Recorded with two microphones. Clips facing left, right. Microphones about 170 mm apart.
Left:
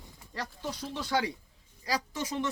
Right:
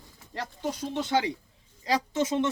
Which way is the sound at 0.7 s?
25° right (ahead or behind).